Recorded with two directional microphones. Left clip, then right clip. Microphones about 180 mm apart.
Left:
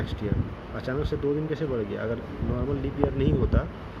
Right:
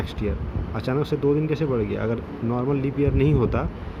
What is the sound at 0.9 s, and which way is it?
Speech, 45° right (ahead or behind).